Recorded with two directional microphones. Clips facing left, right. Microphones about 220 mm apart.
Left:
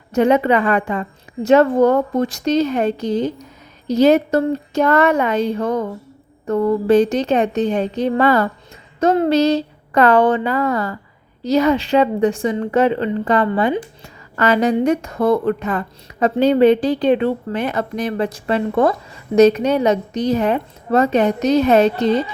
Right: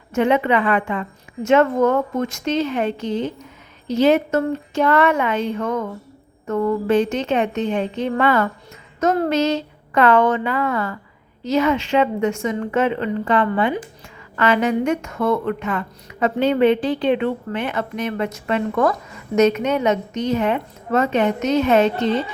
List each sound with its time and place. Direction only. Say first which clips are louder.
0.1 s a woman's voice: left 3 dB; 40° left (ahead or behind)
9.0 s a woman's voice: left 4 dB; 25° left (ahead or behind)